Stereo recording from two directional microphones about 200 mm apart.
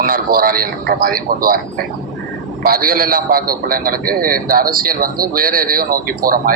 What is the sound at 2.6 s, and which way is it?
A man's voice, 50° right (ahead or behind).